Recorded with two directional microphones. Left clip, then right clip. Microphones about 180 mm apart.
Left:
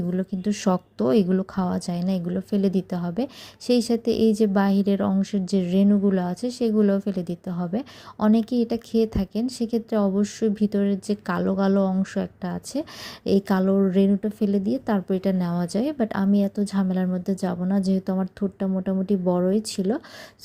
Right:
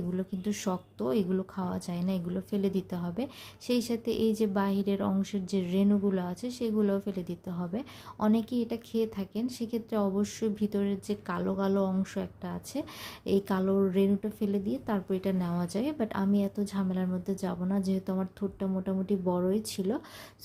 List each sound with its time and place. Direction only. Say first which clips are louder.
0.1 s a woman's voice: left 7 dB; 25° left (ahead or behind)